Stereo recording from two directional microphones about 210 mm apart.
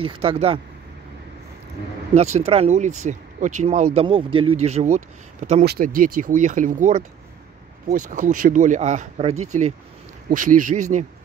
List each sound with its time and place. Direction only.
0.0 s speech: 25° right (ahead or behind)
2.1 s speech: 30° right (ahead or behind)